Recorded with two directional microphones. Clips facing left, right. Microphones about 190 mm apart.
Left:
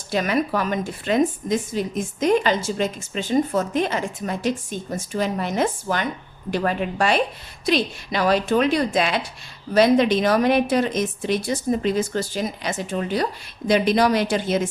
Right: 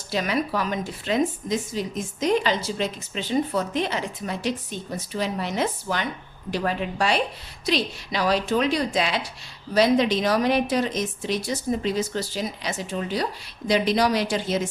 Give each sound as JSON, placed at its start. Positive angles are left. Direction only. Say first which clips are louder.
{"t": 0.1, "sound": "a woman's voice", "louder": "left 3 dB", "side_deg": 50}